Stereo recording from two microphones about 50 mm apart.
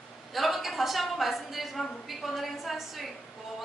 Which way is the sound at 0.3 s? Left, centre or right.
Centre.